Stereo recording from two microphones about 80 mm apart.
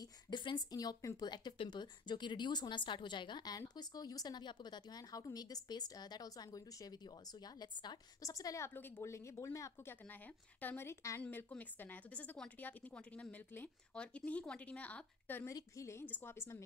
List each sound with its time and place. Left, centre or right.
0.3 s speech: left
0.7 s a woman's voice: left
1.2 s a woman's voice: left
7.4 s a woman's voice: left
8.2 s a woman's voice: left
8.6 s speech: left
10.0 s a woman's voice: left
15.5 s speech: left